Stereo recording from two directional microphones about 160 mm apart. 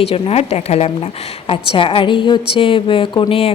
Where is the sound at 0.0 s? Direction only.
40° left (ahead or behind).